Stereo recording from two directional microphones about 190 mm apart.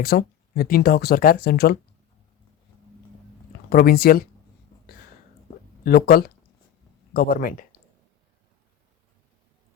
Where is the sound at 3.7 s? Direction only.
50° left (ahead or behind).